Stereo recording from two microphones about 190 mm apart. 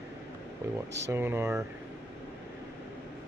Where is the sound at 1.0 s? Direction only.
10° right (ahead or behind).